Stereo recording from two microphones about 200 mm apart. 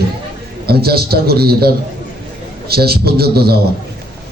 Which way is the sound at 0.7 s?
50° right (ahead or behind).